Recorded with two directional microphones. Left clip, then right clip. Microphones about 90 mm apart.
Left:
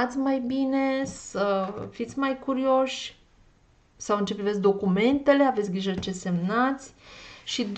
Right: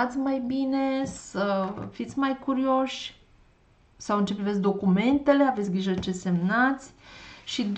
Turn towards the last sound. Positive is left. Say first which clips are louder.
# left 1 dB
turn(degrees=30)  # may be behind; listen again after turning